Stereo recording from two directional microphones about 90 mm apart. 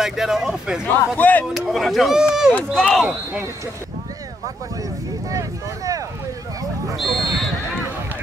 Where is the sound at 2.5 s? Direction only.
10° left (ahead or behind).